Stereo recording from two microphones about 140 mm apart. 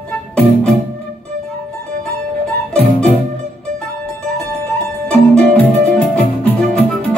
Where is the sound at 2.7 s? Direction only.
Centre (ahead or behind).